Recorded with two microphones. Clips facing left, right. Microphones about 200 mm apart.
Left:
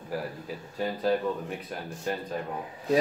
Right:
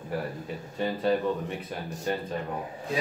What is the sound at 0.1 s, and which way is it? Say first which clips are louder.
Speech: right 1 dB; centre (ahead or behind).